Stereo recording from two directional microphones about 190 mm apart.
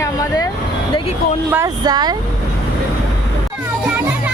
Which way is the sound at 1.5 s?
15° right (ahead or behind).